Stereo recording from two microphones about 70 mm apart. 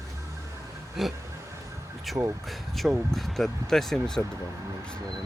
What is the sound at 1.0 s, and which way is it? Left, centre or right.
Speech, centre.